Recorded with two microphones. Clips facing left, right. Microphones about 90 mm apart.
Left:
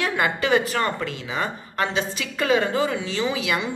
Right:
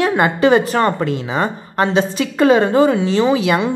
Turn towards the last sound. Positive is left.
turn(degrees=-35)  # may be behind; listen again after turning